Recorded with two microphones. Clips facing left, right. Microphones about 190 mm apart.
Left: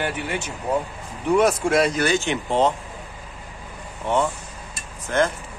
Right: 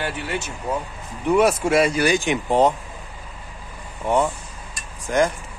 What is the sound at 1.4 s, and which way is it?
Speech, 5° right (ahead or behind).